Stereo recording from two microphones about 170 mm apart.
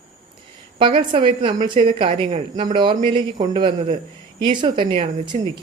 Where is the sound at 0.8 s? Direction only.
30° right (ahead or behind).